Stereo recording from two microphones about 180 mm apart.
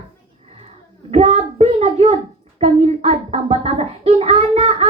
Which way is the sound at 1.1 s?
35° right (ahead or behind).